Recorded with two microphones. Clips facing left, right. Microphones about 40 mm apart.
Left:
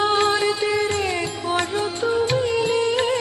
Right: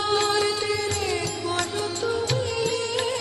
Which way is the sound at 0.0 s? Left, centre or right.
Left.